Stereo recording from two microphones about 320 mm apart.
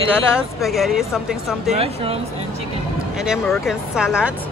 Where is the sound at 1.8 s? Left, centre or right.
Centre.